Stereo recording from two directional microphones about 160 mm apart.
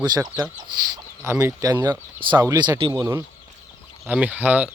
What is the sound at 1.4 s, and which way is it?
Speech, 20° right (ahead or behind).